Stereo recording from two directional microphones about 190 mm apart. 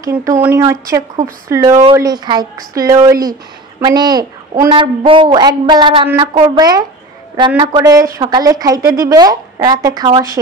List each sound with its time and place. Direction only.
0.0 s a woman's voice: 15° right (ahead or behind)